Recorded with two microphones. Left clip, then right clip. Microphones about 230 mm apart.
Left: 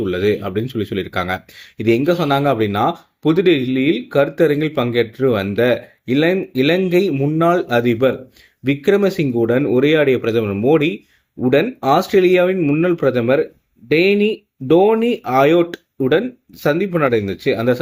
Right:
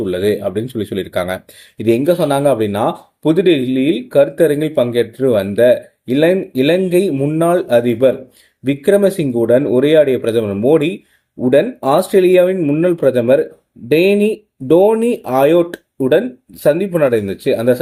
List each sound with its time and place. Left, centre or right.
0.0 s speech: centre